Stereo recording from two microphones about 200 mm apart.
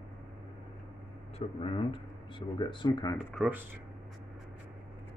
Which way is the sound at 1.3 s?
25° left (ahead or behind).